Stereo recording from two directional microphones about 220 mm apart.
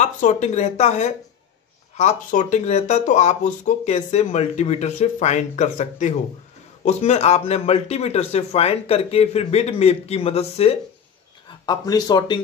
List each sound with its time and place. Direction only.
0.0 s a man's voice: 35° left (ahead or behind)